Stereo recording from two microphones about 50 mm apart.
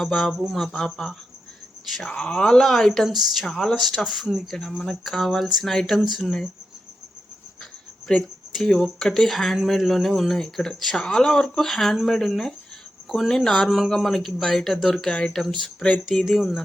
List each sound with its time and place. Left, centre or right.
0.0 s speech: centre
3.4 s speech: centre
3.8 s speech: centre
8.1 s speech: centre
10.9 s speech: centre
11.4 s speech: centre
13.7 s speech: centre
15.1 s speech: centre
16.2 s speech: centre